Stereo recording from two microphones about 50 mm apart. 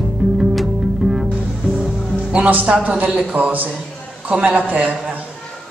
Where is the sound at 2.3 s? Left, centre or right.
Right.